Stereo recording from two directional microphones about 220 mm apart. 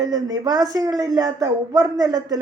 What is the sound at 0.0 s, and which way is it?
A woman's voice, 15° right (ahead or behind).